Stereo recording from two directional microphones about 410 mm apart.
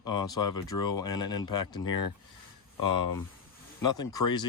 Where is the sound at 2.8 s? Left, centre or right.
Left.